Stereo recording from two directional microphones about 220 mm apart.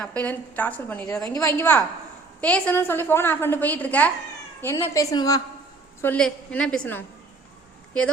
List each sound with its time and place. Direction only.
0.0 s a woman's voice: 5° left (ahead or behind)